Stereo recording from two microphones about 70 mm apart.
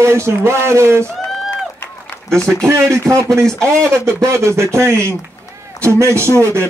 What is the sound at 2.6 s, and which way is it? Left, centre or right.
A man's voice, right.